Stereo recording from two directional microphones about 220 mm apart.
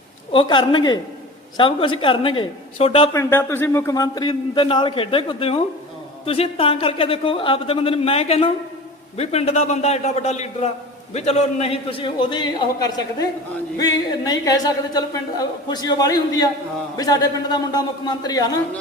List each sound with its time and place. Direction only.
0.3 s speech: 20° left (ahead or behind)
3.1 s a woman's voice: 10° left (ahead or behind)